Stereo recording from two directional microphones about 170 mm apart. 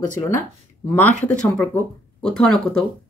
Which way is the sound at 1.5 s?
5° left (ahead or behind).